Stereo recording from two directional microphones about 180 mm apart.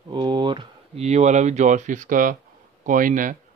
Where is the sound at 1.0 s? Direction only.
40° right (ahead or behind).